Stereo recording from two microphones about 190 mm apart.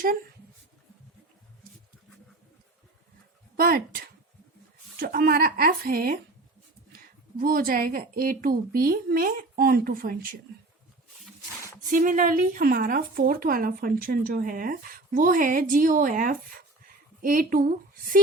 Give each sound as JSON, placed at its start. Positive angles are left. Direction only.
{"t": 3.6, "sound": "speech", "side_deg": -50}
{"t": 7.3, "sound": "speech", "side_deg": -50}
{"t": 11.9, "sound": "a woman's voice", "side_deg": -45}